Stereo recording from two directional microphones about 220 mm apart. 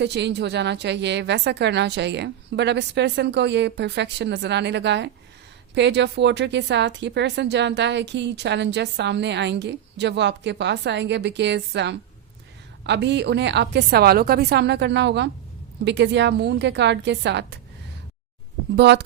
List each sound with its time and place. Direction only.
0.0 s speech: 50° right (ahead or behind)
18.8 s speech: 50° right (ahead or behind)